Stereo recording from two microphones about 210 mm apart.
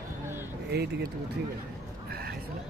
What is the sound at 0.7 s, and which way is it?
Speech, 50° right (ahead or behind).